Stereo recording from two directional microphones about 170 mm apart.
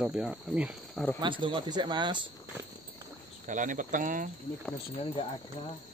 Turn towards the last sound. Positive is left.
turn(degrees=-50)  # may be behind; listen again after turning